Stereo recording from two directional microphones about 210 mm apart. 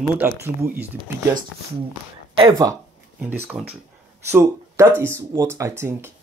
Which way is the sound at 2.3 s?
20° right (ahead or behind).